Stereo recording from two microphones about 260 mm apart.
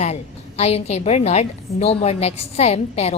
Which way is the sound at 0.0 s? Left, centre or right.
Left.